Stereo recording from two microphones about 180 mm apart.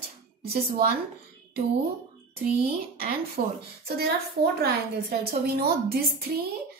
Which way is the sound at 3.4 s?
55° right (ahead or behind).